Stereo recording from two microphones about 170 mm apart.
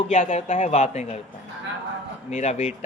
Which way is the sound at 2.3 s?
45° left (ahead or behind).